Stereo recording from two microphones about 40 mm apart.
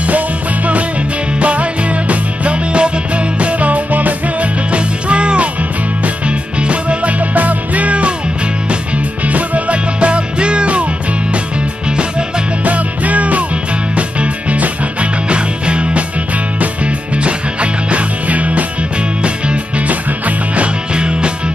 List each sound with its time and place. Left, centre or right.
1.4 s music: right
4.6 s music: right
12.6 s music: right
20.9 s music: right